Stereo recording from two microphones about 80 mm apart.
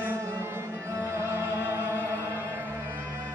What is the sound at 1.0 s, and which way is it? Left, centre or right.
Music, right.